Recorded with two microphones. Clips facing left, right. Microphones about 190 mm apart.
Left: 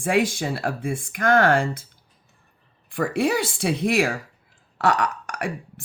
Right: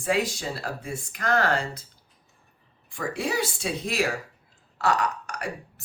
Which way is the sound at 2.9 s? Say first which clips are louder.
Left 7 dB; 60° left (ahead or behind).